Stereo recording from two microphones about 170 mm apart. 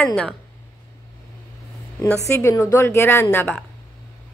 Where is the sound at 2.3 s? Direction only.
15° left (ahead or behind).